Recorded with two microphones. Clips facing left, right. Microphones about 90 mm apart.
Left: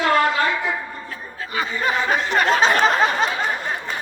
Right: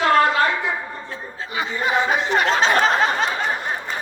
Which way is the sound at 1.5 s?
20° right (ahead or behind).